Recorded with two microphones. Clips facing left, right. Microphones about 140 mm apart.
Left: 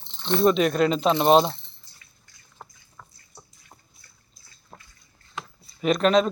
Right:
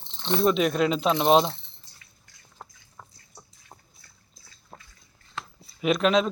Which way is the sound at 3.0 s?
25° right (ahead or behind).